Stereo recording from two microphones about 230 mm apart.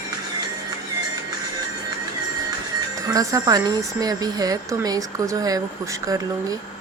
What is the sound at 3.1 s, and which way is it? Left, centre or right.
A woman's voice, centre.